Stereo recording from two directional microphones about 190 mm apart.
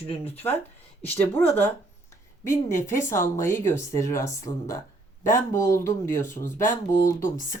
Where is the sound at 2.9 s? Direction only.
15° left (ahead or behind).